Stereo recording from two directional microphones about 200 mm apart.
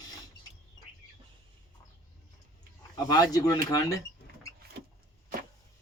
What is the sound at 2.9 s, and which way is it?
Speech, 20° left (ahead or behind).